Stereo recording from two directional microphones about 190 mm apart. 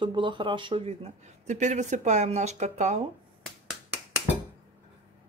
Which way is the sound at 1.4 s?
40° right (ahead or behind).